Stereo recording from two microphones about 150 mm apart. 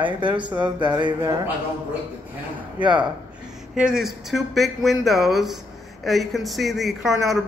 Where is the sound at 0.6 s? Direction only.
30° right (ahead or behind).